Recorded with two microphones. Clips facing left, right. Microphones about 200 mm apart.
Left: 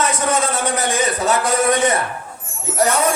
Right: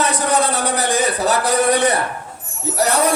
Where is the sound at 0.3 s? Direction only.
35° right (ahead or behind).